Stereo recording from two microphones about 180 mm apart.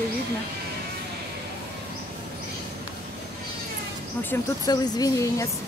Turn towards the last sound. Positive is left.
turn(degrees=20)  # may be behind; listen again after turning